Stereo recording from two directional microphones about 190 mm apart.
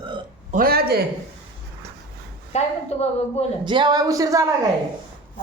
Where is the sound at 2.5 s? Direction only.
35° left (ahead or behind).